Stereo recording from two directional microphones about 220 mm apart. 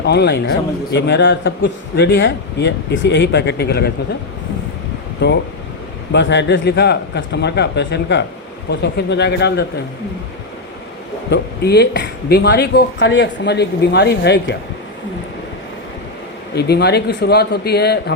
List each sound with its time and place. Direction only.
0.0 s speech: 50° left (ahead or behind)
5.2 s speech: 50° left (ahead or behind)
11.3 s speech: 45° left (ahead or behind)
16.6 s speech: 50° left (ahead or behind)